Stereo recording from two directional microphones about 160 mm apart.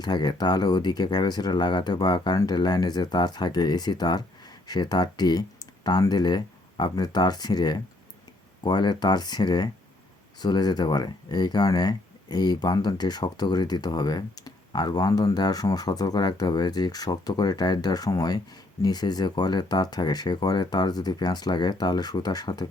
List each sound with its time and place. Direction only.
0.0 s speech: 25° left (ahead or behind)